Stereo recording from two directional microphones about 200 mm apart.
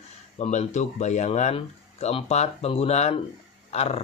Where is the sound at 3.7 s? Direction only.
30° left (ahead or behind).